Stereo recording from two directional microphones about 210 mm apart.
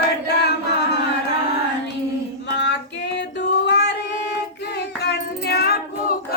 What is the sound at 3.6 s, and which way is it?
Music, 55° left (ahead or behind).